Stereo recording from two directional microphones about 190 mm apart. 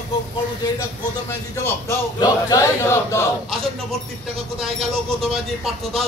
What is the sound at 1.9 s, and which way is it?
Speech, 20° left (ahead or behind).